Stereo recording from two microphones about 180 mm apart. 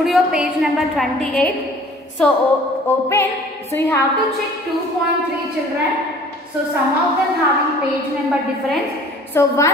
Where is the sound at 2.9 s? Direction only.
10° left (ahead or behind).